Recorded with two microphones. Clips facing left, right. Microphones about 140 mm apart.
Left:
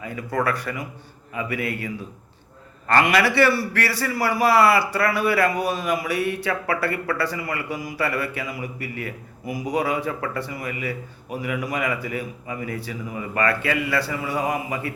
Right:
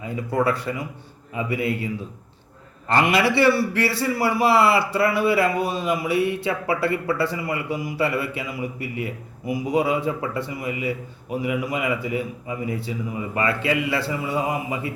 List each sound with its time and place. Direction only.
0.0 s a man's voice: 25° right (ahead or behind)
2.9 s a man's voice: 25° right (ahead or behind)